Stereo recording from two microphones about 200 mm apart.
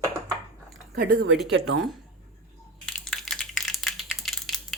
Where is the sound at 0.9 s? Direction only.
50° right (ahead or behind).